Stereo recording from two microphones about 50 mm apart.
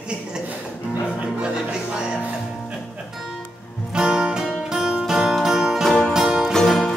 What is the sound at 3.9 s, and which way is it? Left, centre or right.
Music, centre.